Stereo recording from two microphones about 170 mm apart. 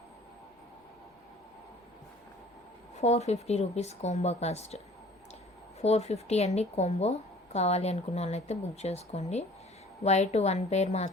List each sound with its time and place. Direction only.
2.9 s a woman's voice: 40° left (ahead or behind)
5.8 s a woman's voice: 40° left (ahead or behind)